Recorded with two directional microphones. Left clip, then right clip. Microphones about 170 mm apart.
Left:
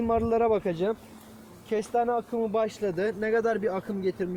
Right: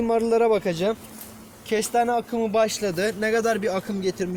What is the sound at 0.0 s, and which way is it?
Speech, 40° left (ahead or behind).